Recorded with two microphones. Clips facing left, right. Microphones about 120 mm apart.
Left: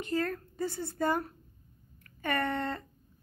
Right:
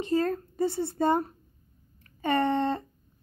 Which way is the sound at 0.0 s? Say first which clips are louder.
Right 6 dB; 25° right (ahead or behind).